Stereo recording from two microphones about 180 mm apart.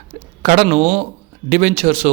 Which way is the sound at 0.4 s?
45° right (ahead or behind).